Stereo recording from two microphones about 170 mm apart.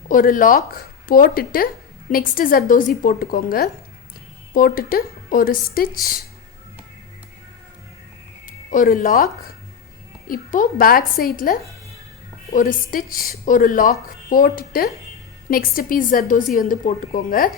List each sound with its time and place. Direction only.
0.1 s speech: 55° left (ahead or behind)
8.4 s speech: 55° left (ahead or behind)
10.2 s speech: 55° left (ahead or behind)
12.5 s speech: 55° left (ahead or behind)